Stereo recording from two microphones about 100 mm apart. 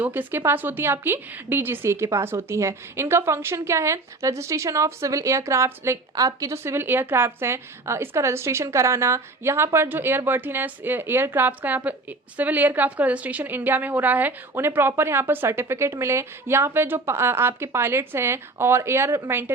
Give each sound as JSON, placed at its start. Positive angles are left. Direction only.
{"t": 0.0, "sound": "a woman's voice", "side_deg": -20}